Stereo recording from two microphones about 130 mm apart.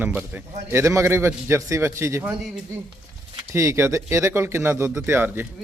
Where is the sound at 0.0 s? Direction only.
15° right (ahead or behind).